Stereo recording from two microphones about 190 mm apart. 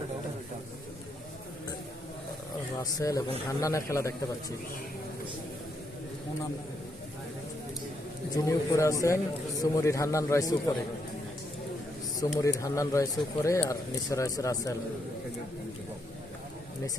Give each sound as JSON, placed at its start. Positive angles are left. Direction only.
{"t": 3.0, "sound": "a man's voice", "side_deg": 15}
{"t": 8.4, "sound": "a man's voice", "side_deg": 15}
{"t": 12.4, "sound": "a man's voice", "side_deg": 15}